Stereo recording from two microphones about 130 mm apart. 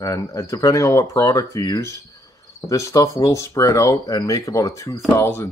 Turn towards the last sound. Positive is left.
turn(degrees=20)  # may be behind; listen again after turning